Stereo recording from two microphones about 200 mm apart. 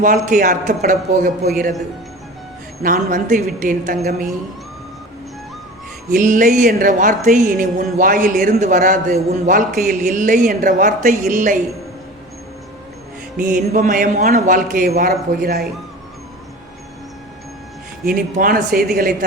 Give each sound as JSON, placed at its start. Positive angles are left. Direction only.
{"t": 0.0, "sound": "a woman's voice", "side_deg": -40}
{"t": 2.8, "sound": "a woman's voice", "side_deg": -40}
{"t": 6.1, "sound": "a woman's voice", "side_deg": -40}
{"t": 13.4, "sound": "a man's voice", "side_deg": -40}
{"t": 18.3, "sound": "a man's voice", "side_deg": -45}